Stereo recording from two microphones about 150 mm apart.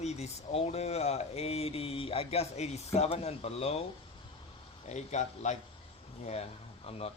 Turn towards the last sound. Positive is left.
turn(degrees=45)  # may be behind; listen again after turning